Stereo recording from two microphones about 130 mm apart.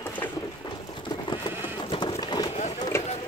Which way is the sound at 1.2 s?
35° left (ahead or behind).